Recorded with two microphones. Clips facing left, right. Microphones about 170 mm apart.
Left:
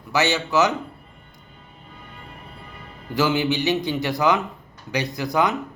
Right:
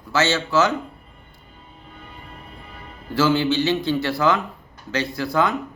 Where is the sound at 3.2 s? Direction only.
15° left (ahead or behind).